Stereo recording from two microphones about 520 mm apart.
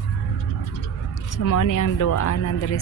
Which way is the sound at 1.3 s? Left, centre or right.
Left.